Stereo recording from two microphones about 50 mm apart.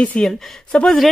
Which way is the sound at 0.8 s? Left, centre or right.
Centre.